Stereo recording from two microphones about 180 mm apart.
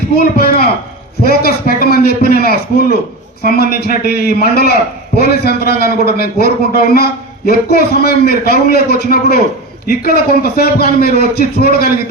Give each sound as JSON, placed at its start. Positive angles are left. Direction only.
{"t": 0.2, "sound": "a man's voice", "side_deg": 55}